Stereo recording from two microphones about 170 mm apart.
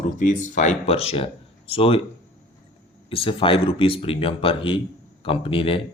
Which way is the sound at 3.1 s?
30° left (ahead or behind).